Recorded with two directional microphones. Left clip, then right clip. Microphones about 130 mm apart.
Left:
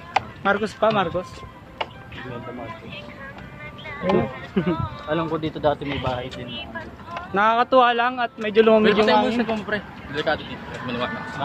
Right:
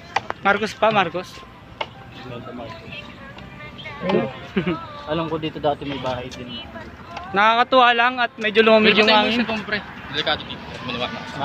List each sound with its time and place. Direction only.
0.4 s a man's voice: centre (ahead or behind)
4.0 s speech: 5° left (ahead or behind)
5.2 s speech: 25° left (ahead or behind)
5.9 s a man's voice: 50° left (ahead or behind)
7.3 s a man's voice: 5° left (ahead or behind)
9.3 s speech: 55° left (ahead or behind); by 11.1 s 90° left